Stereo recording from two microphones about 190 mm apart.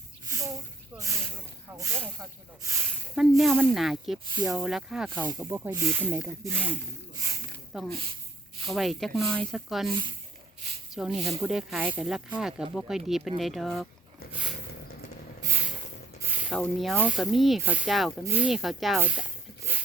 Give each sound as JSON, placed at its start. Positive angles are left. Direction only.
{"t": 0.3, "sound": "a sound", "side_deg": -15}
{"t": 0.9, "sound": "snake", "side_deg": -15}
{"t": 1.7, "sound": "speech", "side_deg": -15}
{"t": 3.2, "sound": "speech", "side_deg": 0}
{"t": 10.9, "sound": "speech", "side_deg": -5}
{"t": 15.4, "sound": "a sound", "side_deg": -15}
{"t": 16.2, "sound": "spray", "side_deg": -10}
{"t": 16.6, "sound": "speech", "side_deg": 0}